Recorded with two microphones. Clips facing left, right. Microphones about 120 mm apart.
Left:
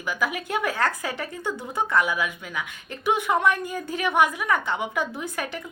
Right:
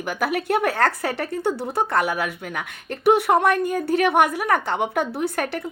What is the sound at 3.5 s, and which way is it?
A woman's voice, 60° right (ahead or behind).